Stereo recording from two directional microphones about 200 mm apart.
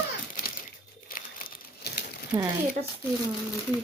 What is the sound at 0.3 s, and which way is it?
Crumpling, 45° left (ahead or behind).